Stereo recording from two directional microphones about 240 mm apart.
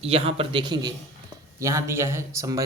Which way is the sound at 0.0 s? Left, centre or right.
Right.